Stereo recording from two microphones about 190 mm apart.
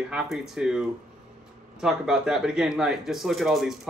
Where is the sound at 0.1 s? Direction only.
Centre (ahead or behind).